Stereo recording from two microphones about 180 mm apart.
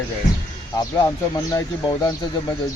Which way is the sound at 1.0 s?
20° left (ahead or behind).